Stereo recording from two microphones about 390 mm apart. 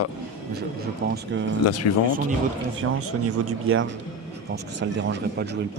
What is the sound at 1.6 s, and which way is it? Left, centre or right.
Speech, left.